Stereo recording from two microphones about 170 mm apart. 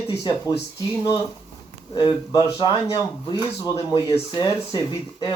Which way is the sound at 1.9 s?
25° left (ahead or behind).